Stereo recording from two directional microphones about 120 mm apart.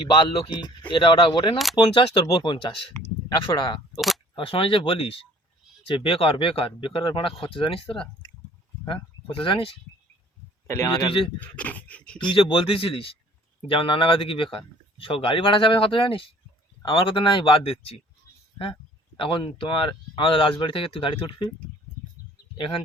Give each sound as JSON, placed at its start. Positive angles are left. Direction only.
{"t": 0.2, "sound": "speech", "side_deg": 40}
{"t": 10.7, "sound": "speech", "side_deg": 20}
{"t": 12.2, "sound": "speech", "side_deg": 45}
{"t": 22.5, "sound": "speech", "side_deg": 45}